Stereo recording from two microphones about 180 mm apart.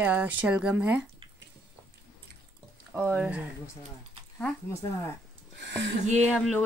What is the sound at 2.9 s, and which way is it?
Speech, 10° right (ahead or behind).